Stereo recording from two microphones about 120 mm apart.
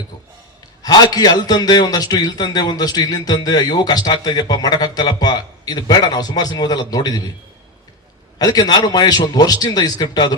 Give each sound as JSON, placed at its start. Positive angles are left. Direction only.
{"t": 0.8, "sound": "a man's voice", "side_deg": 35}
{"t": 8.4, "sound": "a man's voice", "side_deg": 35}